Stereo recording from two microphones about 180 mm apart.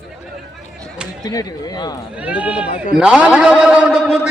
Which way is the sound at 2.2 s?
10° right (ahead or behind).